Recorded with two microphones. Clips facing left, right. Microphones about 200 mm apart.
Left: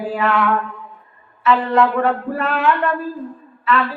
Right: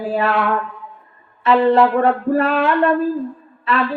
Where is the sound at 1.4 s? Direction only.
35° right (ahead or behind).